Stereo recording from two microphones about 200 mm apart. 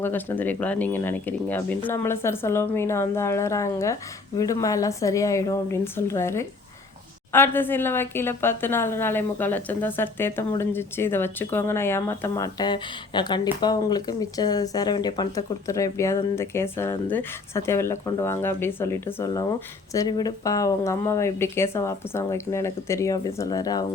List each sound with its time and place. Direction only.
0.0 s speech: 10° left (ahead or behind)